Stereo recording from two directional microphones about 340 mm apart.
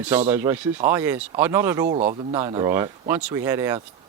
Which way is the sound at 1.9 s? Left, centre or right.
Centre.